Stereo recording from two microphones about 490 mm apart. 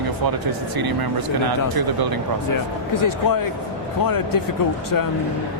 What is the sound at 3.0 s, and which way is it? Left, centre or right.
Speech, left.